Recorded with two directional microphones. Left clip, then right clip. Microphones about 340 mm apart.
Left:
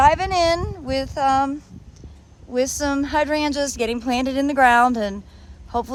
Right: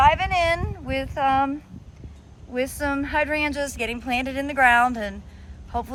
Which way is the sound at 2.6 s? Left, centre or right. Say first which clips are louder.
Left 4 dB; centre.